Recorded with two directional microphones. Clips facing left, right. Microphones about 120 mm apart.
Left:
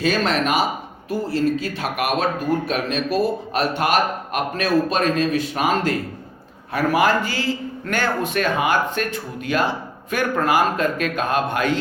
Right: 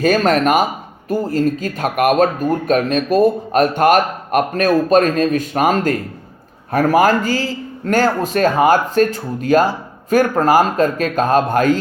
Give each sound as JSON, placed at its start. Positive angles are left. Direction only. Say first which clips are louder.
{"t": 0.0, "sound": "a man's voice", "louder": "right 6 dB", "side_deg": -45}